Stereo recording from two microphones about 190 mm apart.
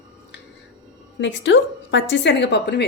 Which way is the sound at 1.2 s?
75° left (ahead or behind).